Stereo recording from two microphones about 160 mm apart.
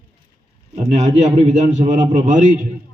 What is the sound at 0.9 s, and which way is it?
A man's voice, 40° right (ahead or behind).